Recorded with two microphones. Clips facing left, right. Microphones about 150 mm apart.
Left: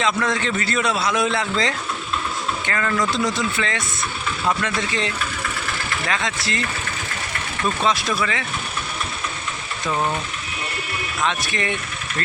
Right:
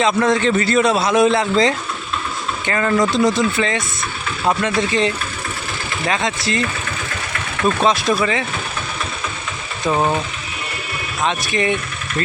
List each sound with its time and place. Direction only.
0.2 s a man's voice: 25° right (ahead or behind)
8.1 s a man's voice: 25° right (ahead or behind)
9.9 s a man's voice: 25° right (ahead or behind)
11.2 s a man's voice: 20° right (ahead or behind)